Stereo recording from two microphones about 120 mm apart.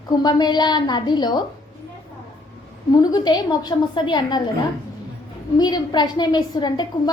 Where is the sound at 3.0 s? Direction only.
35° left (ahead or behind).